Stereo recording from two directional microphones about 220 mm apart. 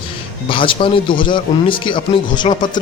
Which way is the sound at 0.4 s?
25° left (ahead or behind).